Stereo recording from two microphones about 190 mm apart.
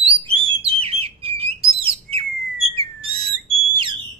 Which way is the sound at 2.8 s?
30° right (ahead or behind).